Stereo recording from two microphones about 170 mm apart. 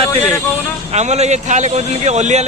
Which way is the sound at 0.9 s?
40° right (ahead or behind).